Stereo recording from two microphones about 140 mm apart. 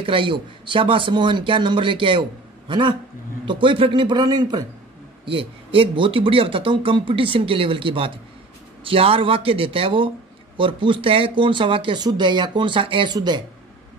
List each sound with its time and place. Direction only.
0.0 s speech: 40° right (ahead or behind)
5.2 s speech: 40° right (ahead or behind)